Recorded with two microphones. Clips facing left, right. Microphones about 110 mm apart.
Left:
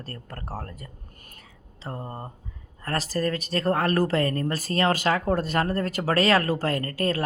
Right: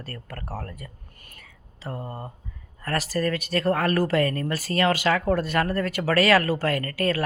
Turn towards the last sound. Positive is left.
turn(degrees=35)  # may be behind; listen again after turning